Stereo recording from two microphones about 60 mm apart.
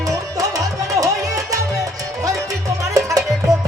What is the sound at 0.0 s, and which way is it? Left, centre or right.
Music, right.